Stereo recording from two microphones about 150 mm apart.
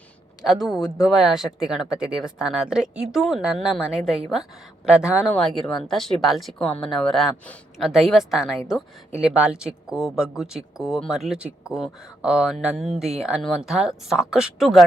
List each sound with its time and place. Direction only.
0.4 s a woman's voice: centre (ahead or behind)
5.2 s speech: 5° left (ahead or behind)